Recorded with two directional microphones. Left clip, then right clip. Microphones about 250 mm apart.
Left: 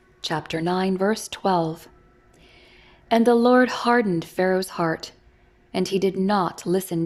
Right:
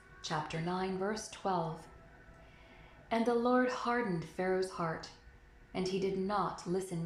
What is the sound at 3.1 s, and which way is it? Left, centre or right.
A woman's voice, left.